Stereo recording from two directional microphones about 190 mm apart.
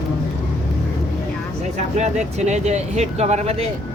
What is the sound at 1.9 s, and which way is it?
Speech, 35° right (ahead or behind).